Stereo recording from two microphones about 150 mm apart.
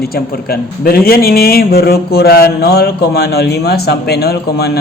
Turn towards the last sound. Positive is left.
turn(degrees=90)